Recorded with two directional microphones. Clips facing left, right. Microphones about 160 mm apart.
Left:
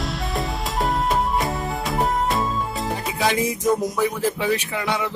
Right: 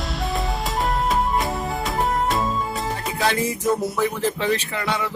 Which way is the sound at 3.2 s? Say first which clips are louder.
Left 1 dB; 15° left (ahead or behind).